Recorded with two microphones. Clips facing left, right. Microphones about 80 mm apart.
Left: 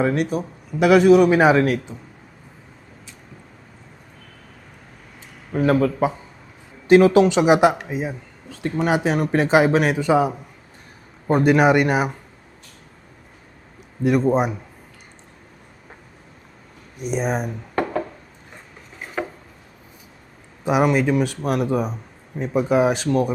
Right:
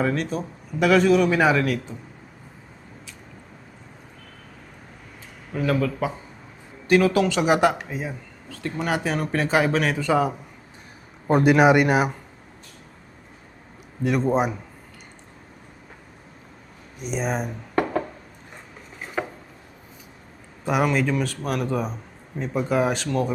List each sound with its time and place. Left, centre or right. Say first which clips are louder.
0.0 s a man's voice: left 4 dB; centre
5.5 s speech: left 5 dB; left
6.8 s a man's voice: left 6 dB; left; by 10.3 s centre
11.3 s a man's voice: left 1 dB; centre
14.0 s a man's voice: left 3 dB; centre
17.1 s speech: left 3 dB; centre
20.7 s a man's voice: left 4 dB; centre